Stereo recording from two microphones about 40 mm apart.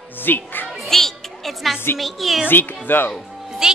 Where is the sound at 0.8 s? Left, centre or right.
Centre.